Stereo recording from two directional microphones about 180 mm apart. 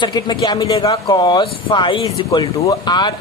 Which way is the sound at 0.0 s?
25° left (ahead or behind).